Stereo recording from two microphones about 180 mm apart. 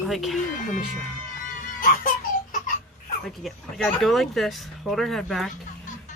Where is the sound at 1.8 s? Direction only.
50° left (ahead or behind).